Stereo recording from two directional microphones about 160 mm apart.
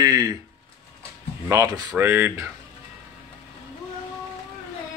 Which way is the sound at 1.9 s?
10° right (ahead or behind).